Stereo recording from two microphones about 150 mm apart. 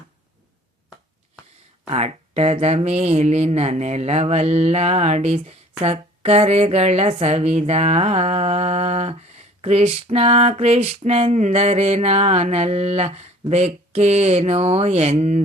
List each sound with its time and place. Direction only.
1.9 s speech: 45° right (ahead or behind)